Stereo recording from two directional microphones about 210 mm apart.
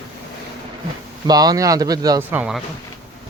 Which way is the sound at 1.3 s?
20° right (ahead or behind).